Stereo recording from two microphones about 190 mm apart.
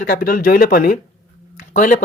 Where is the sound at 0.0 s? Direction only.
50° left (ahead or behind).